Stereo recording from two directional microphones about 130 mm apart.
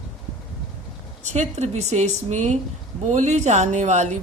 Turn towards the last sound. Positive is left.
turn(degrees=-65)  # may be behind; listen again after turning